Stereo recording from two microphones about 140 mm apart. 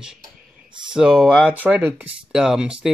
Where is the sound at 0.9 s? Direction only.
5° right (ahead or behind).